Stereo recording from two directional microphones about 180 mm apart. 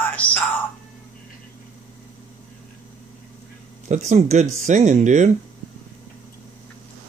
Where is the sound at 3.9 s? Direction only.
40° right (ahead or behind).